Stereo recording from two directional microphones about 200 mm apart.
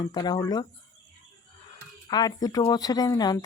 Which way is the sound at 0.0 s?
20° left (ahead or behind).